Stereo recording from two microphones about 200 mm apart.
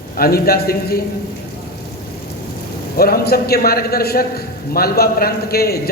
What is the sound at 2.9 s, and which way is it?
A man's voice, 50° left (ahead or behind).